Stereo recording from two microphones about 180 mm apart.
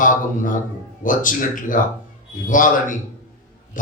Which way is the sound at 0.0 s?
45° left (ahead or behind).